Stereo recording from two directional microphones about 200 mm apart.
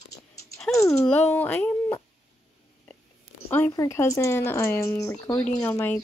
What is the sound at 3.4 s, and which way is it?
Speech, 10° left (ahead or behind).